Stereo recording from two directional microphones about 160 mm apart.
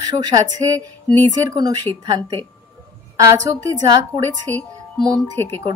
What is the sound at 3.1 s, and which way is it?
Speech, 20° right (ahead or behind).